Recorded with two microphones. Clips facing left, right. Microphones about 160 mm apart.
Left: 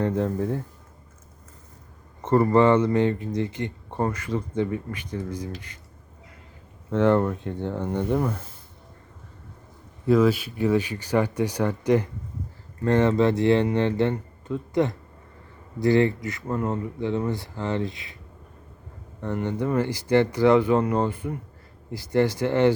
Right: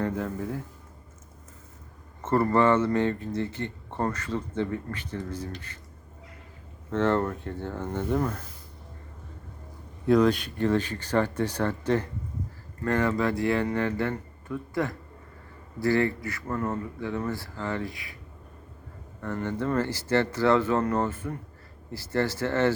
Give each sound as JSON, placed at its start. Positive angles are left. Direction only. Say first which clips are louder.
{"t": 0.3, "sound": "speech", "louder": "left 6 dB", "side_deg": 30}
{"t": 2.2, "sound": "speech", "louder": "left 4 dB", "side_deg": 15}
{"t": 6.9, "sound": "speech", "louder": "left 4 dB", "side_deg": 15}
{"t": 10.1, "sound": "speech", "louder": "left 2 dB", "side_deg": 5}
{"t": 19.2, "sound": "speech", "louder": "left 3 dB", "side_deg": 15}